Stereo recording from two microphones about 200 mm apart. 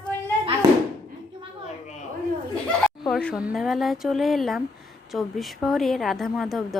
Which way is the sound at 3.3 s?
5° right (ahead or behind).